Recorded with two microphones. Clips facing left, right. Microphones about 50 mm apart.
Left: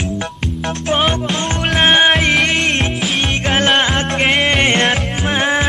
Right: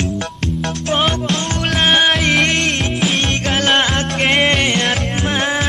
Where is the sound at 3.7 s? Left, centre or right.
Centre.